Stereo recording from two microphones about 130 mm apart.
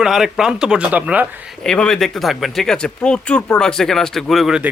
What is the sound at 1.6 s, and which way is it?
Speech, 5° left (ahead or behind).